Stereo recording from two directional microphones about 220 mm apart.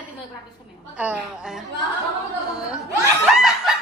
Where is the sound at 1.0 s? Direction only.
5° right (ahead or behind).